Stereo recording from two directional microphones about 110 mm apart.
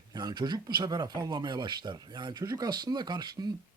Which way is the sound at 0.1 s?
40° right (ahead or behind).